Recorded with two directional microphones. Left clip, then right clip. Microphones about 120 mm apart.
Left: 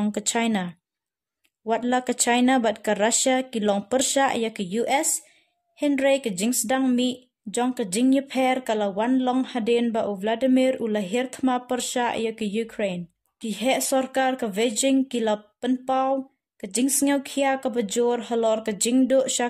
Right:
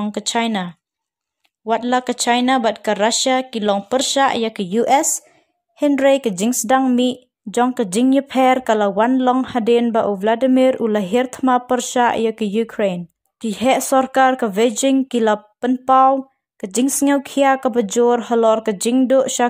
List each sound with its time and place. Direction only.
0.1 s speech: centre (ahead or behind)
4.6 s speech: 40° right (ahead or behind)